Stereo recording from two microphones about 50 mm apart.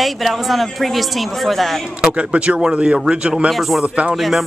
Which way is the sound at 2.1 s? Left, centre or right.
Right.